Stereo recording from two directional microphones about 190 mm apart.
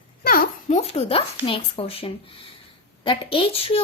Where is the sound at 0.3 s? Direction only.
50° left (ahead or behind).